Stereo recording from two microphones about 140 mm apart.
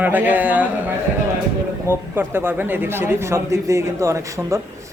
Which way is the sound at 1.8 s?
15° right (ahead or behind).